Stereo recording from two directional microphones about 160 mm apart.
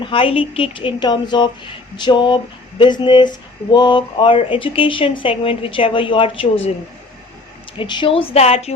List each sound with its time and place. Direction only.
0.0 s speech: 35° left (ahead or behind)
2.0 s a sound: 30° left (ahead or behind)
3.7 s speech: 30° left (ahead or behind)
7.8 s speech: 30° left (ahead or behind)